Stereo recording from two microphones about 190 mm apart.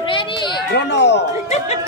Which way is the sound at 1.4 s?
35° left (ahead or behind).